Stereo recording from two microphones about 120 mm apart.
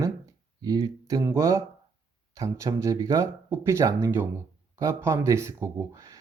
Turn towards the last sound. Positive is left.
turn(degrees=-25)  # may be behind; listen again after turning